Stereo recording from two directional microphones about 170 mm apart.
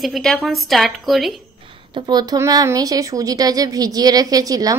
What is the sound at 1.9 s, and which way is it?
Speech, 25° right (ahead or behind).